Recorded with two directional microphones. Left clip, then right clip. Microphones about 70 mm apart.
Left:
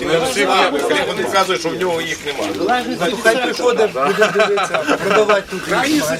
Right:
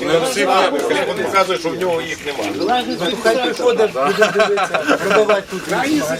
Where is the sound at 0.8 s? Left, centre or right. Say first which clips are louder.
Left 1 dB; left.